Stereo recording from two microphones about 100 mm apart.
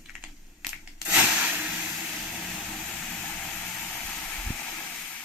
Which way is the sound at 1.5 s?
15° right (ahead or behind).